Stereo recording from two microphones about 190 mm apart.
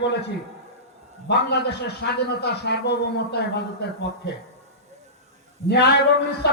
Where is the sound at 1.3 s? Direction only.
60° left (ahead or behind).